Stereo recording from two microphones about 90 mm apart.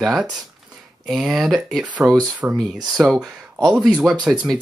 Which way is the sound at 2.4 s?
15° right (ahead or behind).